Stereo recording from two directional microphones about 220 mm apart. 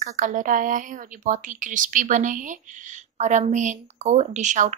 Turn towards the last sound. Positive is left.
turn(degrees=-35)  # may be behind; listen again after turning